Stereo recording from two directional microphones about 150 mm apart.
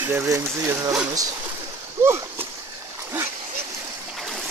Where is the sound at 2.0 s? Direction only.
15° right (ahead or behind).